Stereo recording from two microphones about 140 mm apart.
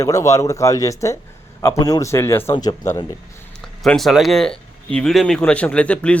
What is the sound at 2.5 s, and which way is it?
Speech, 30° left (ahead or behind).